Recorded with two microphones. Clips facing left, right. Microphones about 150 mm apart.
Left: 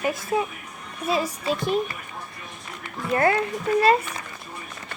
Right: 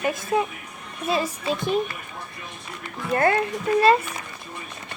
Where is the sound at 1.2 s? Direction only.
25° right (ahead or behind).